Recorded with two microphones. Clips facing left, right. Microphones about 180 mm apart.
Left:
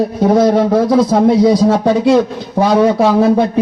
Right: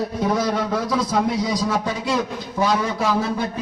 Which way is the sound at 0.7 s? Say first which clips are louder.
Left 11 dB; 50° left (ahead or behind).